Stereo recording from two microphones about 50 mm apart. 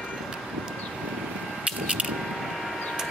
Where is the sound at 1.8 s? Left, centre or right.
Right.